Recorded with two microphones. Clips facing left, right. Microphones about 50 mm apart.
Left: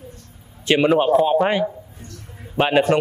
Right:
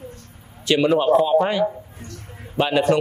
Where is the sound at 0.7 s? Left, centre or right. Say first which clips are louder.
Left 1 dB; left.